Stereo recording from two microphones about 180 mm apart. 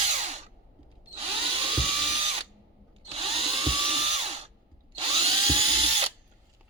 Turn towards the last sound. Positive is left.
turn(degrees=-30)  # may be behind; listen again after turning